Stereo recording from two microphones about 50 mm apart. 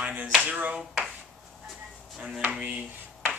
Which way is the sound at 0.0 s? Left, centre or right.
Right.